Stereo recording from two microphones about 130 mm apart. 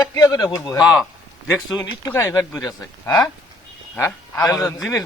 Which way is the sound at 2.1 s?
20° left (ahead or behind).